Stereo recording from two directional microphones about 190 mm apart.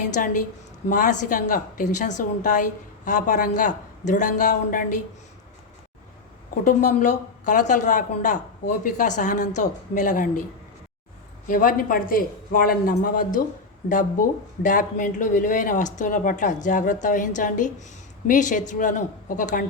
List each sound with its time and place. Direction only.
0.2 s a woman's voice: 45° left (ahead or behind)
6.5 s a woman's voice: 40° left (ahead or behind)
11.4 s a woman's voice: 45° left (ahead or behind)